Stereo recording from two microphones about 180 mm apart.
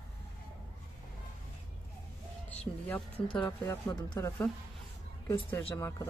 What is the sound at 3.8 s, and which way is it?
Speech, 25° left (ahead or behind).